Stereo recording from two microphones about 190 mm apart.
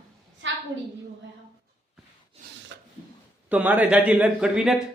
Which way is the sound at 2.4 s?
50° right (ahead or behind).